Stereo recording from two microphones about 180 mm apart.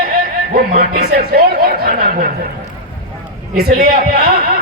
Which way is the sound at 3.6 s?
55° right (ahead or behind).